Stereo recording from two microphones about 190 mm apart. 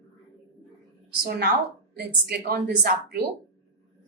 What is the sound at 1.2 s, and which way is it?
A woman's voice, 60° right (ahead or behind).